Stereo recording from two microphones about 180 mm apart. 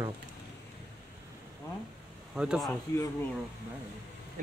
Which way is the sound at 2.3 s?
5° right (ahead or behind).